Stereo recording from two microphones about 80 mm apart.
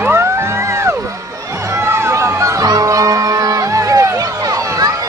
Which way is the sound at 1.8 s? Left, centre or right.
Right.